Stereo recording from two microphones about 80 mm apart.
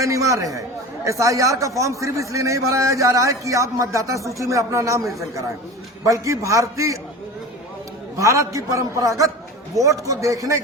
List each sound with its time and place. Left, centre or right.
0.0 s a man's voice: right
8.1 s a man's voice: right